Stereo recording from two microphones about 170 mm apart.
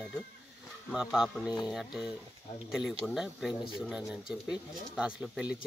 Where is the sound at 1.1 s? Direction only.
5° right (ahead or behind).